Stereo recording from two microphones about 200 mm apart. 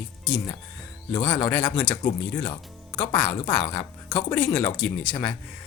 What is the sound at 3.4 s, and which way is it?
Speech, 15° left (ahead or behind).